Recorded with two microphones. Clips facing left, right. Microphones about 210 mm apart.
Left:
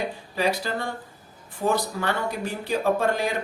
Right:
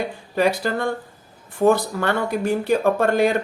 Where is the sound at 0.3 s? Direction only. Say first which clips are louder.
Right 6 dB; 55° right (ahead or behind).